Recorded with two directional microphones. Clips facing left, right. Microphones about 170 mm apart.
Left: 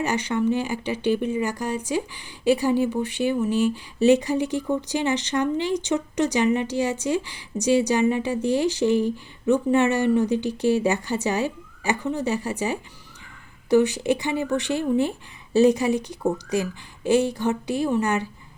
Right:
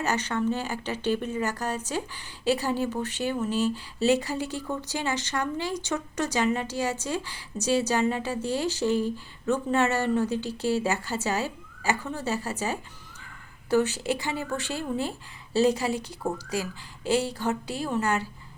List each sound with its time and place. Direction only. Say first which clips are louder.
0.0 s speech: left 4 dB; 15° left (ahead or behind)